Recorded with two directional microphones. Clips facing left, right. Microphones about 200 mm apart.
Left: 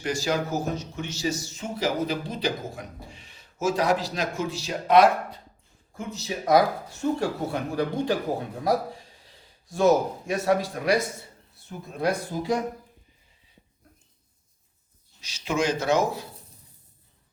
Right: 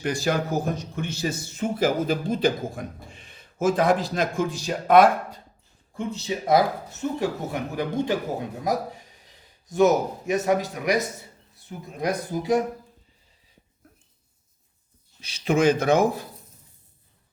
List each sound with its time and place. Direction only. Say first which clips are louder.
0.0 s a man's voice: right 2 dB; 55° right (ahead or behind)
6.1 s speech: right 1 dB; 30° right (ahead or behind)
9.6 s speech: right 1 dB; 20° right (ahead or behind)
15.2 s speech: right 6 dB; 55° right (ahead or behind)